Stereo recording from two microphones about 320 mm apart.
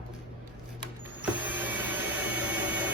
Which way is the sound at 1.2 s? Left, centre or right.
Centre.